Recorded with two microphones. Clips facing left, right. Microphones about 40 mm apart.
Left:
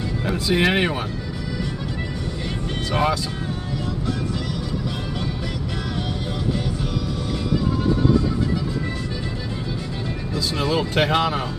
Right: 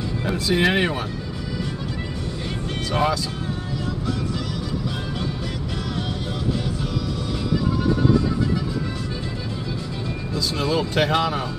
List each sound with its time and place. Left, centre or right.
0.5 s speech: centre
2.9 s speech: centre
10.3 s speech: left